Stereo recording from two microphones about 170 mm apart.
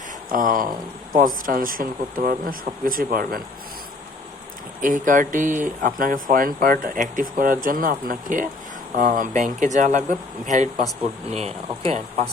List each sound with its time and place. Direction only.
0.3 s speech: 50° right (ahead or behind)
4.8 s speech: 50° right (ahead or behind)